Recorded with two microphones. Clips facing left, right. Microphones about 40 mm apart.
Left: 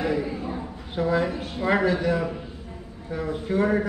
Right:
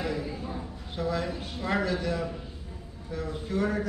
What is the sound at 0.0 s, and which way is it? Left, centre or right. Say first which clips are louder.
A man's voice: left 6 dB; left.